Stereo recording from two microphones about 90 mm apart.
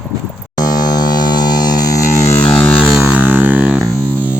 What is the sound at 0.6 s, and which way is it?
Music, 45° left (ahead or behind).